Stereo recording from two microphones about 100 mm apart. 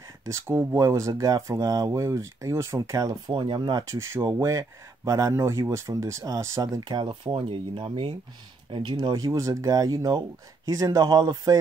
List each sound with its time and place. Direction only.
0.2 s speech: 25° right (ahead or behind); by 3.8 s 50° right (ahead or behind)
3.9 s speech: 30° right (ahead or behind)
7.0 s speech: 55° right (ahead or behind)